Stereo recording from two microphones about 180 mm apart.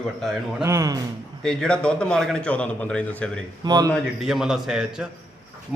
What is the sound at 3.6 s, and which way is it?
Speech, 20° right (ahead or behind).